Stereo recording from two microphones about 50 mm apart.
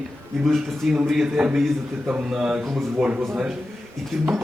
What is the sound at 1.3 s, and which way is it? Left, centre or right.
Speech, centre.